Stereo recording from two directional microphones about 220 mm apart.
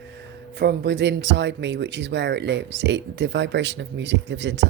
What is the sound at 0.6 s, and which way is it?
Speech, 50° right (ahead or behind).